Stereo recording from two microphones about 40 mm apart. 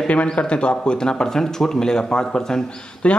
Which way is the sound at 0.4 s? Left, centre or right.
Left.